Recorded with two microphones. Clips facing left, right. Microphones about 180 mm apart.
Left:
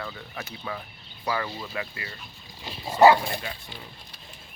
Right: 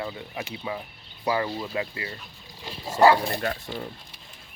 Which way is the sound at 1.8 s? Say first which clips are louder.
Right 2 dB; 25° right (ahead or behind).